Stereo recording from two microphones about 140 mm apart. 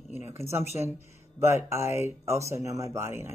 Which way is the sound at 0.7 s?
20° right (ahead or behind).